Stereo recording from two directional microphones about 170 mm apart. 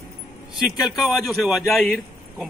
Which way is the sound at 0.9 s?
Centre (ahead or behind).